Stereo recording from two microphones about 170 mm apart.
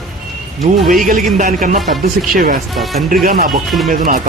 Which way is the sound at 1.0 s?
55° right (ahead or behind).